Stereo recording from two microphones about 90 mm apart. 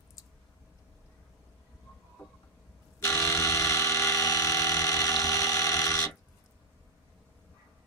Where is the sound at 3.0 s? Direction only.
35° left (ahead or behind).